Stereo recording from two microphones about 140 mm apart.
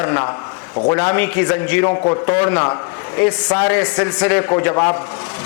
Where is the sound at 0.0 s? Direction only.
15° left (ahead or behind).